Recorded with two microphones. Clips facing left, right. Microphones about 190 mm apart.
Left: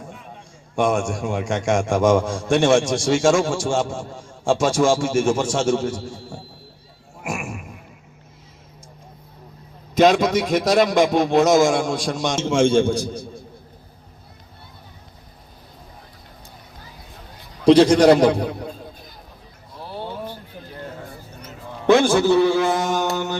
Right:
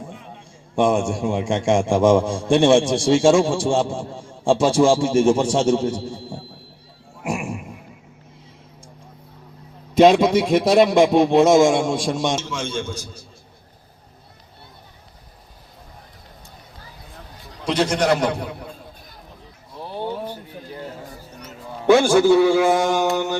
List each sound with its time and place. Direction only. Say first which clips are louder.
0.8 s a man's voice: right 2 dB; 30° right (ahead or behind)
7.3 s a sound: right 3 dB; 30° right (ahead or behind)
9.9 s a man's voice: right 2 dB; 30° right (ahead or behind)
12.5 s a man's voice: left 11 dB; 55° left (ahead or behind)
17.7 s a man's voice: left 8 dB; 35° left (ahead or behind)
20.0 s a sound: right 4 dB; 15° right (ahead or behind)
21.8 s a man's voice: right 2 dB; 10° right (ahead or behind)